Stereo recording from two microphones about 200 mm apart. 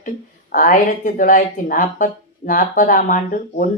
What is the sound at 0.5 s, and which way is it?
A woman's voice, 45° left (ahead or behind).